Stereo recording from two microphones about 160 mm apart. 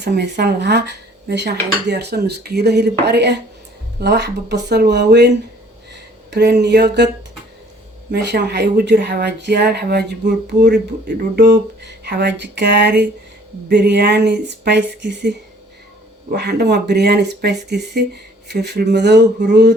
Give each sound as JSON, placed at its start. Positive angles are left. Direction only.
{"t": 0.0, "sound": "speech", "side_deg": -90}
{"t": 6.3, "sound": "speech", "side_deg": -90}
{"t": 8.1, "sound": "speech", "side_deg": -90}